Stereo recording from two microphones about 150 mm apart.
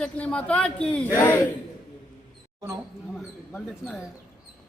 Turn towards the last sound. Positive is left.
turn(degrees=5)  # may be behind; listen again after turning